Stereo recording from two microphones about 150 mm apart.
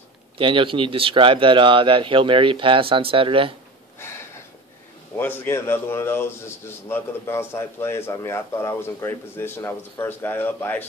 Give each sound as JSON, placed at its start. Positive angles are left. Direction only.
{"t": 0.4, "sound": "speech", "side_deg": -35}
{"t": 5.1, "sound": "a man's voice", "side_deg": 15}